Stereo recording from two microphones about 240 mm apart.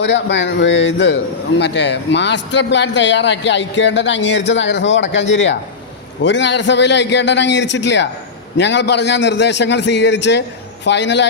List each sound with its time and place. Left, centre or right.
0.0 s a man's voice: left